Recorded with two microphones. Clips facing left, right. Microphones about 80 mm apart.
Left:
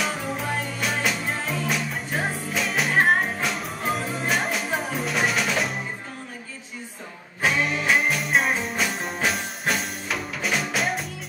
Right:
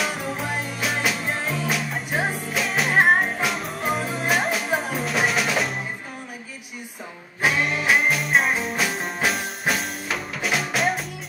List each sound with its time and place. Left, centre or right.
0.5 s music: centre
0.7 s music: centre
7.4 s music: centre